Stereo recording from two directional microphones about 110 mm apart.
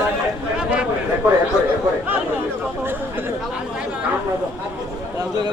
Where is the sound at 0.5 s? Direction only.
10° right (ahead or behind).